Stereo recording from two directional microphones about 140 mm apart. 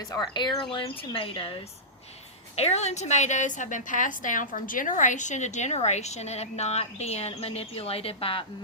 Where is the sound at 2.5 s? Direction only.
50° left (ahead or behind).